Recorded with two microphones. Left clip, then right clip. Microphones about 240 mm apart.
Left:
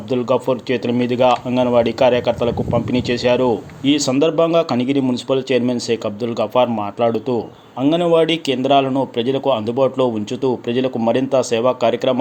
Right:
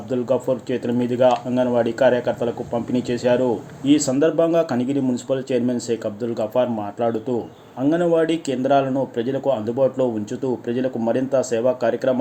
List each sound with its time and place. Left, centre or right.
0.1 s speech: left